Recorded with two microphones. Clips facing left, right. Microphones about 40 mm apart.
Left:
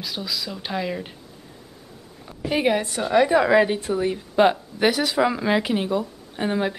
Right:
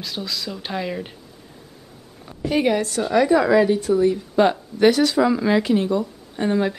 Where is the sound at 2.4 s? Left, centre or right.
Centre.